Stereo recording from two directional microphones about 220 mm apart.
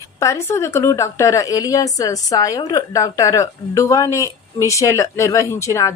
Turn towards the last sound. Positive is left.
turn(degrees=15)  # may be behind; listen again after turning